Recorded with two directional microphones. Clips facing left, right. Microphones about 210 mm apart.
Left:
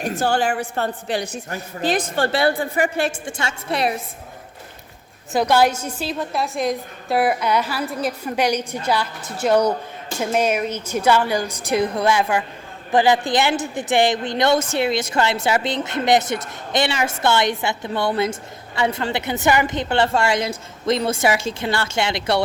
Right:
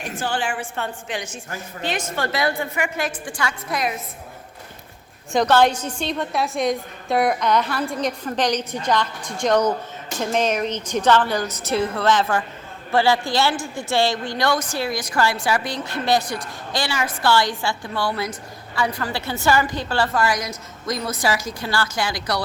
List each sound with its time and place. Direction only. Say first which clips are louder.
0.0 s a woman's voice: left 5 dB; 40° left (ahead or behind)
5.3 s a woman's voice: even; 10° left (ahead or behind); by 22.4 s 25° left (ahead or behind)